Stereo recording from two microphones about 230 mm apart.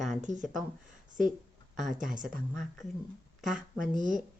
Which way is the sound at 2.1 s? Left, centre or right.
Right.